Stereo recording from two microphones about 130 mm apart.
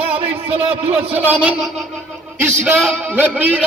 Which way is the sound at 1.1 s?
10° right (ahead or behind).